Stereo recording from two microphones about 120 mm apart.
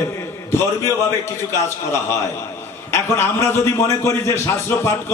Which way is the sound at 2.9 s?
20° left (ahead or behind).